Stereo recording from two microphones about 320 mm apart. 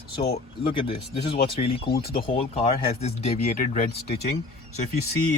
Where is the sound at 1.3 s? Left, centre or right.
Centre.